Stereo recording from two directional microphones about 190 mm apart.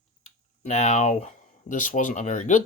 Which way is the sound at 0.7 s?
40° left (ahead or behind).